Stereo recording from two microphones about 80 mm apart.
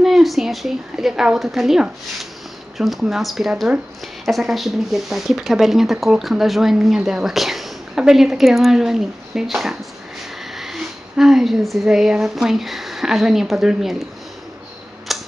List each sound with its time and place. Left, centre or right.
0.0 s a woman's voice: centre
15.1 s tick-tock: centre